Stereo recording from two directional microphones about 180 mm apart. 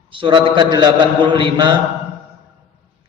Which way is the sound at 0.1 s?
30° right (ahead or behind).